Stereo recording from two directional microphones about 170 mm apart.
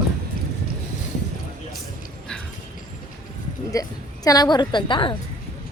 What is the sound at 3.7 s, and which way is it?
A woman's voice, 20° left (ahead or behind).